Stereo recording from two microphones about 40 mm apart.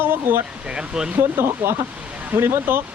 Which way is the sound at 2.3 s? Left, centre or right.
Right.